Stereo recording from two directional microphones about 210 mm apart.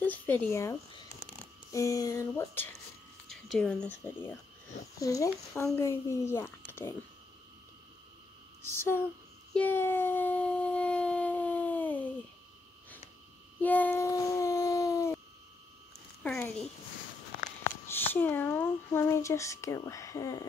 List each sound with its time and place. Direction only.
0.0 s speech: 10° left (ahead or behind)
8.7 s speech: 10° left (ahead or behind)
9.5 s a sound: 10° left (ahead or behind)
13.6 s a sound: 10° left (ahead or behind)
16.2 s speech: 5° left (ahead or behind)
17.8 s speech: 10° left (ahead or behind)